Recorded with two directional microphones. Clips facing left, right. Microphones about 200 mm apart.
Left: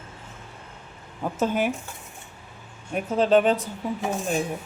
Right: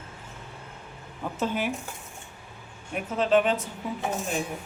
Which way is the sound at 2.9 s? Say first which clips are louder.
Left 3 dB; 35° left (ahead or behind).